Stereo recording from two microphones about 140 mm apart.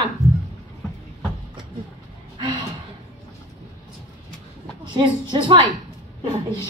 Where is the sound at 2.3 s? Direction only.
35° right (ahead or behind).